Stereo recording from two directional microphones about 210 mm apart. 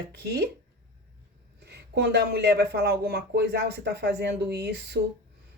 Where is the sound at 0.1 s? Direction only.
50° right (ahead or behind).